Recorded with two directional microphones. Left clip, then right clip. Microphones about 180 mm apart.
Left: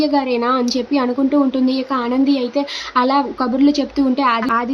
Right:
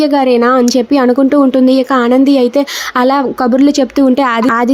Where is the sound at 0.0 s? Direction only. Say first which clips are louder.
Right 8 dB; 45° right (ahead or behind).